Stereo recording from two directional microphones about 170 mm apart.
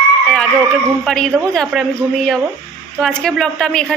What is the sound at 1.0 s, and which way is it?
Speech, 5° left (ahead or behind).